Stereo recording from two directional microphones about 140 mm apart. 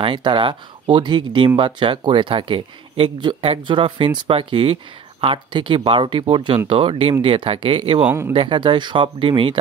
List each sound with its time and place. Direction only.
0.0 s speech: 35° right (ahead or behind)
8.0 s a man's voice: 15° right (ahead or behind)
8.3 s speech: 35° right (ahead or behind)